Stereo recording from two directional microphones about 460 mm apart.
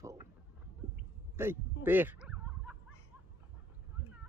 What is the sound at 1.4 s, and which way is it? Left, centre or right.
Bow-wow, centre.